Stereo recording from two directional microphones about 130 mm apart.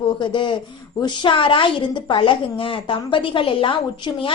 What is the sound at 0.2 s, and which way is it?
A woman's voice, 40° left (ahead or behind).